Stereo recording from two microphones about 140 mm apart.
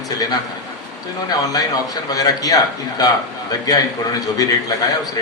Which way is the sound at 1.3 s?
25° left (ahead or behind).